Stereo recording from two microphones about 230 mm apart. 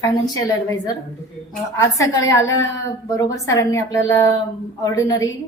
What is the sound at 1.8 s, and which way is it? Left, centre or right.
A woman's voice, centre.